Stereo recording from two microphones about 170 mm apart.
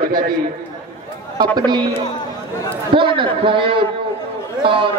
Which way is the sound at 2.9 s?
30° right (ahead or behind).